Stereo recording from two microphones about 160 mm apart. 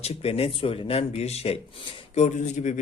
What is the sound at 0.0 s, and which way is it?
Speech, 40° left (ahead or behind).